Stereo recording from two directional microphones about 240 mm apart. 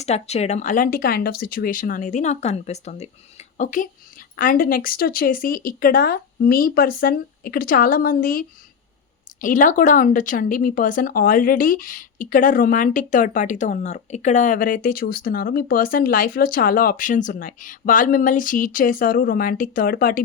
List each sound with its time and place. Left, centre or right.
0.0 s speech: left